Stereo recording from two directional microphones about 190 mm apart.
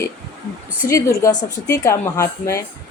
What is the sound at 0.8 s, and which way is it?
A woman's voice, 15° left (ahead or behind).